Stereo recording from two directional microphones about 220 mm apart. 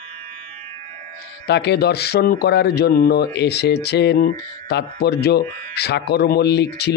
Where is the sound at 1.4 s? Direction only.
50° left (ahead or behind).